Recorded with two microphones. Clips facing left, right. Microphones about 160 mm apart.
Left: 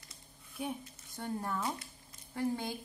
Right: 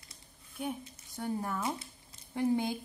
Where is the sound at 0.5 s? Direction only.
Centre (ahead or behind).